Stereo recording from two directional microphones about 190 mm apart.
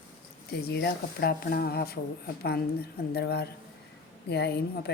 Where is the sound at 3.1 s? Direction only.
60° left (ahead or behind).